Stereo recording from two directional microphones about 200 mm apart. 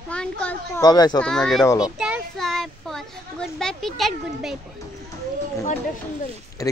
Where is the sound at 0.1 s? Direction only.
5° left (ahead or behind).